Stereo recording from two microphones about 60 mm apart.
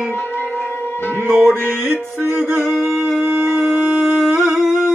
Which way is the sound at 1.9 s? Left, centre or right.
Right.